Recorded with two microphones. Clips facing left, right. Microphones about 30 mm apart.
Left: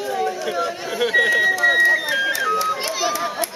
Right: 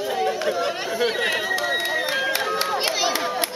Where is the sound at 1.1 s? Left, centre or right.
Right.